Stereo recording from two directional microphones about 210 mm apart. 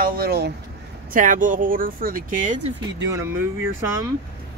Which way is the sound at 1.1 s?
40° right (ahead or behind).